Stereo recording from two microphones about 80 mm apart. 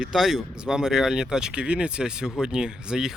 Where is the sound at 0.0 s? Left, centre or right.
Centre.